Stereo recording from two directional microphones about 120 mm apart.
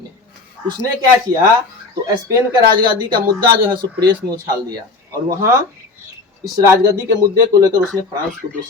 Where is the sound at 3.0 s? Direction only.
35° right (ahead or behind).